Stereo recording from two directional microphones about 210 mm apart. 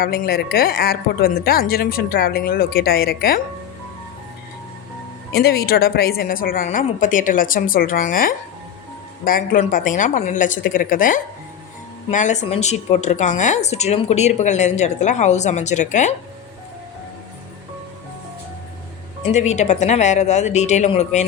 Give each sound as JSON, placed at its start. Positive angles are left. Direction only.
{"t": 0.0, "sound": "a woman's voice", "side_deg": 45}
{"t": 5.3, "sound": "a woman's voice", "side_deg": 50}
{"t": 19.3, "sound": "a woman's voice", "side_deg": 35}